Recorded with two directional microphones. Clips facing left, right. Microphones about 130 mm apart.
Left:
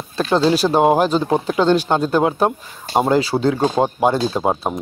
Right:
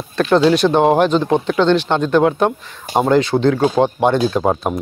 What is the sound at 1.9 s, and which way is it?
Speech, 25° left (ahead or behind).